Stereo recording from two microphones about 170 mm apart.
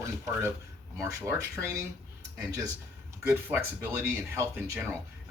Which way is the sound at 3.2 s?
10° right (ahead or behind).